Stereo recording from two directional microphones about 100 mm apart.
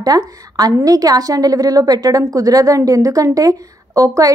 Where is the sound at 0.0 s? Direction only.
40° right (ahead or behind).